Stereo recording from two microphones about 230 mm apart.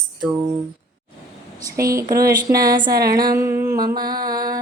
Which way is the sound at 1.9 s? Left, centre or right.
Centre.